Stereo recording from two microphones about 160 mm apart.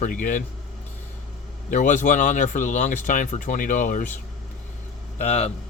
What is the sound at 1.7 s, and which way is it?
Speech, 55° left (ahead or behind).